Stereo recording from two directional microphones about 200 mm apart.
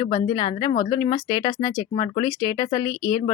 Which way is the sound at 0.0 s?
25° left (ahead or behind).